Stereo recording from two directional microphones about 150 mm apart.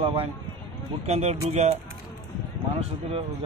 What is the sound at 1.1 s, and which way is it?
Speech, 45° right (ahead or behind).